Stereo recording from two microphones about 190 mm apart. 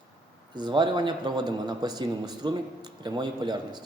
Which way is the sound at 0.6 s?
25° right (ahead or behind).